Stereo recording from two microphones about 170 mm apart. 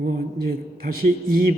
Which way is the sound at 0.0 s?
60° right (ahead or behind).